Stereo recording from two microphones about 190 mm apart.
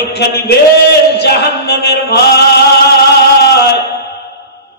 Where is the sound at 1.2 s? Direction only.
60° left (ahead or behind).